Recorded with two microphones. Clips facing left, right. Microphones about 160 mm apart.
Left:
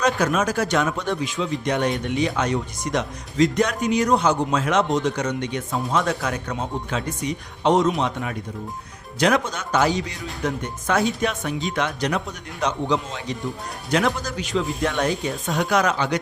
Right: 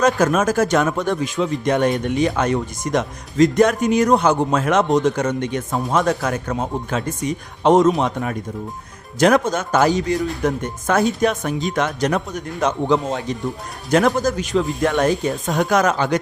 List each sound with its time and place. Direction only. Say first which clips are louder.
0.0 s a man's voice: right 4 dB; 45° right (ahead or behind)